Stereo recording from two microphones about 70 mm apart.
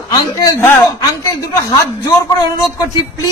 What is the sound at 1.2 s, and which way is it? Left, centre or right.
Speech, left.